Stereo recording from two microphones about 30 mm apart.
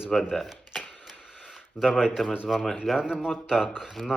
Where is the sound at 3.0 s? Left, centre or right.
Right.